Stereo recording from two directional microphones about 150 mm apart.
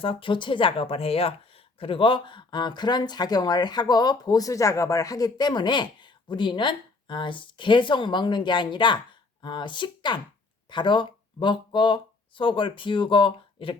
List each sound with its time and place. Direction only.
0.0 s speech: 35° left (ahead or behind)